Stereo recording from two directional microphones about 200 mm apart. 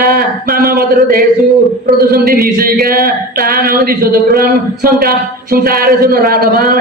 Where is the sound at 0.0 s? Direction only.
45° right (ahead or behind).